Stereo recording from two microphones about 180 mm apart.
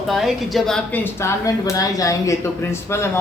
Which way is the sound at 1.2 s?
15° left (ahead or behind).